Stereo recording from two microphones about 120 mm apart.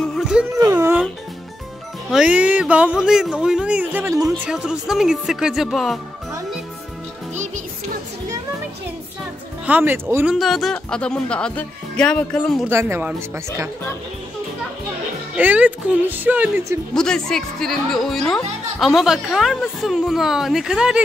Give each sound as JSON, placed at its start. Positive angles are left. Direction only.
{"t": 0.2, "sound": "music", "side_deg": -5}
{"t": 0.6, "sound": "speech", "side_deg": -20}
{"t": 2.0, "sound": "speech", "side_deg": -5}
{"t": 9.7, "sound": "speech", "side_deg": -15}
{"t": 10.2, "sound": "speech", "side_deg": 0}
{"t": 12.6, "sound": "speech", "side_deg": -20}
{"t": 15.3, "sound": "speech", "side_deg": -15}
{"t": 16.9, "sound": "speech", "side_deg": 5}